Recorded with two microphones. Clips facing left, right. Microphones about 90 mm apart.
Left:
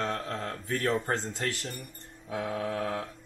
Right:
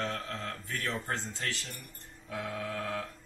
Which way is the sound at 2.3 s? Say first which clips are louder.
Left 5 dB; 20° left (ahead or behind).